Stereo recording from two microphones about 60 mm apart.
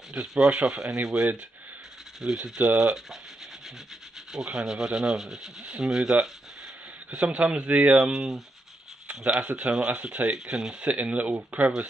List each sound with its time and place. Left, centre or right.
0.1 s speech: centre
4.3 s rub: centre
7.1 s speech: centre
8.0 s speech: centre
10.8 s speech: right